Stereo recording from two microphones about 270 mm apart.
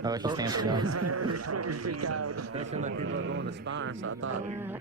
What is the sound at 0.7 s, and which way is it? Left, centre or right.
Speech, right.